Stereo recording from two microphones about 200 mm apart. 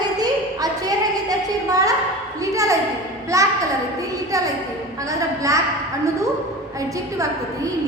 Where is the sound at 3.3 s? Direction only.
15° right (ahead or behind).